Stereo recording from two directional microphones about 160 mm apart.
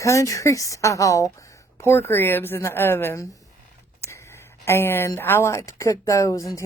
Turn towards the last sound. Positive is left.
turn(degrees=20)  # may be behind; listen again after turning